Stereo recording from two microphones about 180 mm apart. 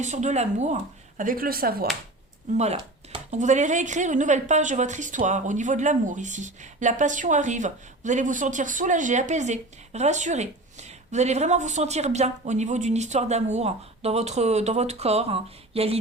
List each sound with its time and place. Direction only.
0.0 s speech: 40° right (ahead or behind); by 1.9 s 55° right (ahead or behind)
2.6 s speech: 35° right (ahead or behind)